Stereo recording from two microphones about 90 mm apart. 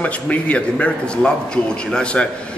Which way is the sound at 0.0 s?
15° left (ahead or behind).